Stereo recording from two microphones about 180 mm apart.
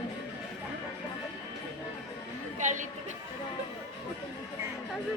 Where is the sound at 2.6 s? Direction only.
45° right (ahead or behind).